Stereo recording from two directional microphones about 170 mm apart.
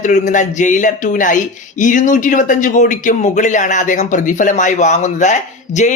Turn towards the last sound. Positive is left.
turn(degrees=45)  # may be behind; listen again after turning